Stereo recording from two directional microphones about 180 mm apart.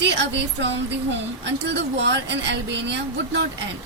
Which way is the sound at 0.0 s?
75° right (ahead or behind).